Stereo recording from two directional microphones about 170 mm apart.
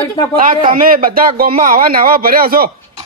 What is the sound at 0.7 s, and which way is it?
Speech, 55° right (ahead or behind).